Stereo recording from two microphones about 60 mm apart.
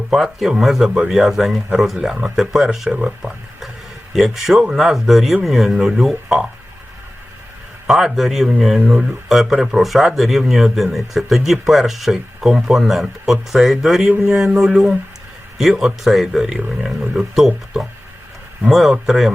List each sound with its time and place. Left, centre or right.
0.1 s speech: centre
2.3 s a sound: centre
4.7 s speech: centre
7.9 s speech: centre
14.3 s a sound: centre
15.8 s speech: centre